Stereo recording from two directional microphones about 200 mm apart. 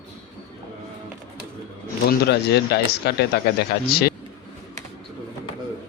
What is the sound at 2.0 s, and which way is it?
A man's voice, 55° left (ahead or behind).